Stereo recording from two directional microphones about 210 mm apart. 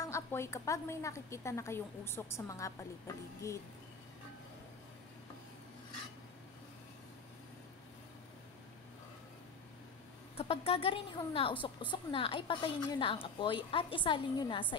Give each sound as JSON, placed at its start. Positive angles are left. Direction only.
{"t": 0.0, "sound": "a woman's voice", "side_deg": 15}
{"t": 10.3, "sound": "a woman's voice", "side_deg": 30}